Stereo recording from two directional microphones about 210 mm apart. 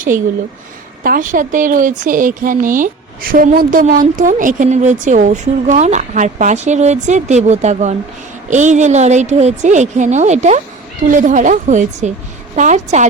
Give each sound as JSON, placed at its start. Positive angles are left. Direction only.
{"t": 1.0, "sound": "speech", "side_deg": -40}